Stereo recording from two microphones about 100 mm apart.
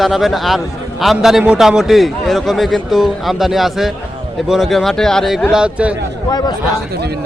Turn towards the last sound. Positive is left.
turn(degrees=40)  # may be behind; listen again after turning